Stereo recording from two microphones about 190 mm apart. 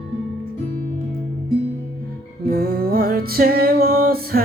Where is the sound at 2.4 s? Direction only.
55° right (ahead or behind).